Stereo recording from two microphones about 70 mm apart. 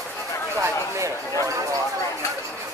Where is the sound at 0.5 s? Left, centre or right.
Right.